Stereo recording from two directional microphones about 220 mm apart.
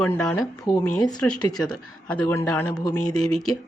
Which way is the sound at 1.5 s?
5° left (ahead or behind).